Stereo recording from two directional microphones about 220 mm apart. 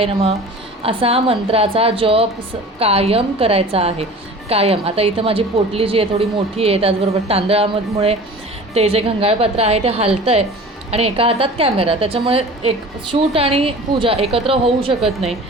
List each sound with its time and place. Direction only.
0.0 s a woman's voice: 25° right (ahead or behind)
8.7 s a woman's voice: 30° right (ahead or behind)